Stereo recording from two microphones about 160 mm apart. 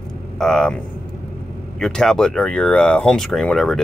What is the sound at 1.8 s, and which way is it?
Speech, 5° left (ahead or behind).